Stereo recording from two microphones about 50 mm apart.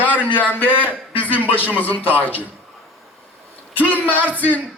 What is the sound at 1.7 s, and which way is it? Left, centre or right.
Speech, left.